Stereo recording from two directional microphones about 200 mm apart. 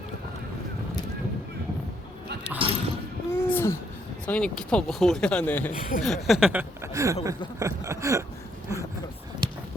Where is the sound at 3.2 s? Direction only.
10° left (ahead or behind).